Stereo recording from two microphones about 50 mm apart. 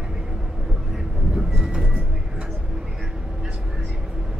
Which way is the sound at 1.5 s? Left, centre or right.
Centre.